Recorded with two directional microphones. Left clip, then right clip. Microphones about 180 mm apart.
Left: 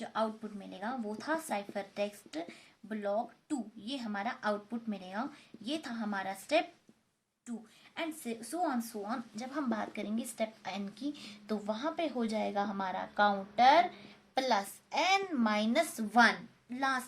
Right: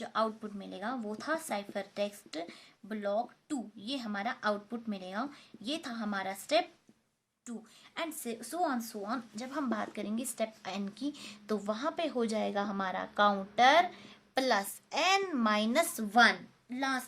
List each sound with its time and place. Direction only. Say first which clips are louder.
0.0 s a woman's voice: right 2 dB; 35° right (ahead or behind)
7.9 s a woman's voice: right 1 dB; 40° right (ahead or behind)